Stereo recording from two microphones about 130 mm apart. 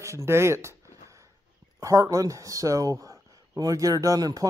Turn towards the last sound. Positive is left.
turn(degrees=-30)  # may be behind; listen again after turning